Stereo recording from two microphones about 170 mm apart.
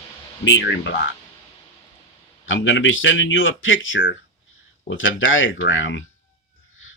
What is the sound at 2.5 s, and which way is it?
Speech, 90° left.